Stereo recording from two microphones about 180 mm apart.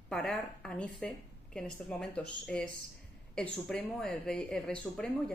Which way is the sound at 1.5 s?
5° left (ahead or behind).